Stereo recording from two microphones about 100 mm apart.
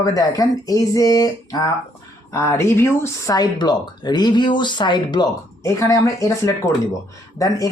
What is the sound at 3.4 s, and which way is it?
Speech, 45° left (ahead or behind).